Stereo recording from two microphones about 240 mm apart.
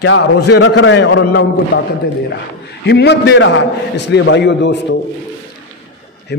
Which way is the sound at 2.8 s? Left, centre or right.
Left.